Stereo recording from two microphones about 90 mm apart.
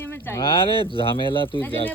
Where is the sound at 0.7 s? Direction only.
85° left.